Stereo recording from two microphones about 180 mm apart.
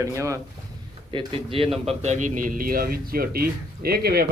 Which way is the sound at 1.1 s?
30° right (ahead or behind).